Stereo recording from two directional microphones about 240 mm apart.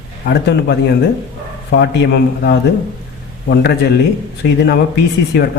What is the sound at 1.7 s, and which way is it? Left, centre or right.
Speech, left.